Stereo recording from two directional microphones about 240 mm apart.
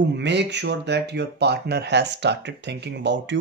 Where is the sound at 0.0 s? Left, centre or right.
Right.